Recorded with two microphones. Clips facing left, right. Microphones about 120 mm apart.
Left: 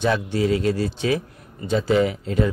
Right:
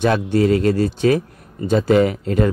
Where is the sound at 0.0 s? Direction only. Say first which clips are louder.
Right 5 dB; 50° right (ahead or behind).